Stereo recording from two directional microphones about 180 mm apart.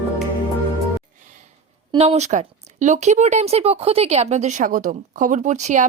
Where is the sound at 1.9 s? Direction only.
35° right (ahead or behind).